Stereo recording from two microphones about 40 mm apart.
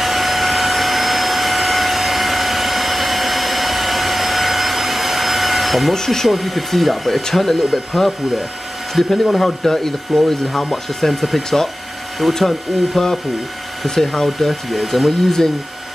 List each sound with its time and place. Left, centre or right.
0.0 s vacuum cleaner: centre
5.9 s speech: centre
9.1 s speech: centre